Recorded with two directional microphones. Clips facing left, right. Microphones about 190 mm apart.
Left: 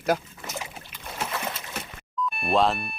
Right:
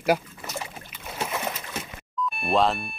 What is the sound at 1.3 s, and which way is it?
Splash, 15° right (ahead or behind).